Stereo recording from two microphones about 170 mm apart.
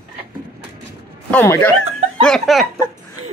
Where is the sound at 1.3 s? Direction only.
10° left (ahead or behind).